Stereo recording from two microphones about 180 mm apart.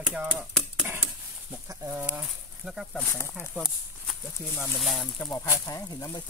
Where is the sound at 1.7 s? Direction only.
10° right (ahead or behind); by 3.3 s 10° left (ahead or behind).